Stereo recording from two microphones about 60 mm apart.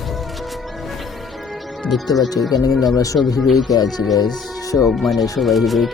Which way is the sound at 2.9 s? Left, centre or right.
Left.